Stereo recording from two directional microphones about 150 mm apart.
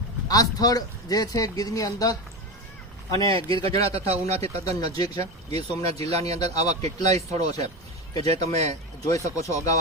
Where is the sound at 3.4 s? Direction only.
35° right (ahead or behind).